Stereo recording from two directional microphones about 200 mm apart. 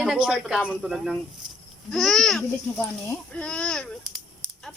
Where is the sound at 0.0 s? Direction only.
Centre (ahead or behind).